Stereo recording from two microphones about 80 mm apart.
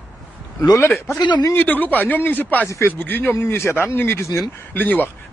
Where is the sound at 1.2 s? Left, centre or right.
Left.